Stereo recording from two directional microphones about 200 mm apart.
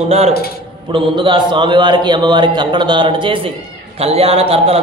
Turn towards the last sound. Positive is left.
turn(degrees=-30)  # may be behind; listen again after turning